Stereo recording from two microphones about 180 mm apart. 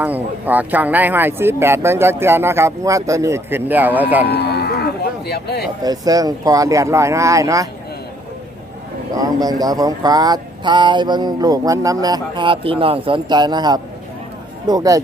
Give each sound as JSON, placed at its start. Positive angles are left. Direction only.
{"t": 0.0, "sound": "speech", "side_deg": -10}
{"t": 4.3, "sound": "livestock", "side_deg": 65}
{"t": 5.8, "sound": "speech", "side_deg": -20}
{"t": 9.1, "sound": "speech", "side_deg": -20}